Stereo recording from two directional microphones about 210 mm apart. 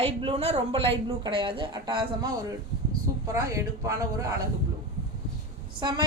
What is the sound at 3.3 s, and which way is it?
Speech, 15° right (ahead or behind).